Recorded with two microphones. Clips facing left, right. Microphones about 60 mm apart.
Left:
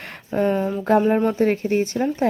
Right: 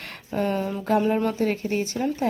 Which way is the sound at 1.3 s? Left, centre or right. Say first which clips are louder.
Left 5 dB; left.